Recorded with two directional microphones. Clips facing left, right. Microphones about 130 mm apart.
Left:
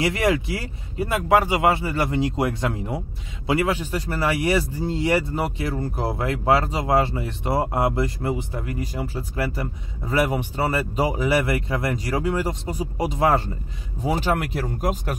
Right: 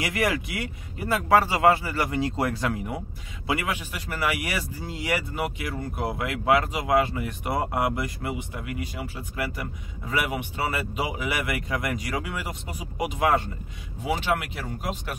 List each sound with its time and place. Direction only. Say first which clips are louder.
0.0 s speech: left 5 dB; 25° left (ahead or behind); by 15.1 s 40° left (ahead or behind)